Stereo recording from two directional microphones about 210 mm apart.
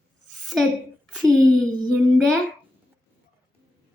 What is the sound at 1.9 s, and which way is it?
Child singing, 5° left (ahead or behind).